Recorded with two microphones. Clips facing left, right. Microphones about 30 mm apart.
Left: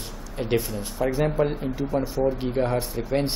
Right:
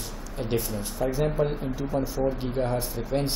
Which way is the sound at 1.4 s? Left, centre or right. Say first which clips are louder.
Left 3 dB; centre.